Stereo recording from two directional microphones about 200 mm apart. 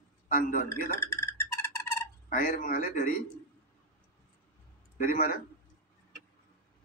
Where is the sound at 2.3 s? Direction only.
45° left (ahead or behind).